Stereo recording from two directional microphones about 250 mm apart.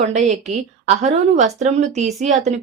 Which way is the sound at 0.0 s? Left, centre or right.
Right.